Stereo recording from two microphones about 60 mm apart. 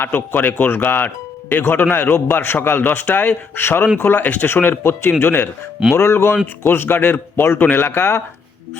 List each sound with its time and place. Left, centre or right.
0.0 s a man's voice: left
4.4 s a man's voice: left